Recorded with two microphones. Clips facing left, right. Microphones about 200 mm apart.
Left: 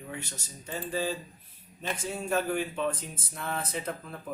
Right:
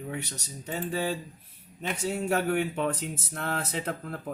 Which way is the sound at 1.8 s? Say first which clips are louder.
Right 4 dB; 70° right (ahead or behind).